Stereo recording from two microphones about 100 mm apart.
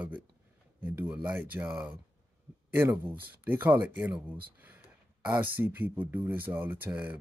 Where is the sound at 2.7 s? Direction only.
20° right (ahead or behind).